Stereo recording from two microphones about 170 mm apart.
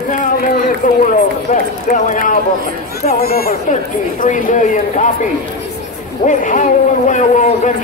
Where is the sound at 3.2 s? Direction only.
65° left (ahead or behind).